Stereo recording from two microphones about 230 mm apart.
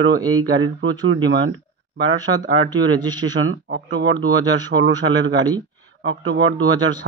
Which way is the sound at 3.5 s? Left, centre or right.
Right.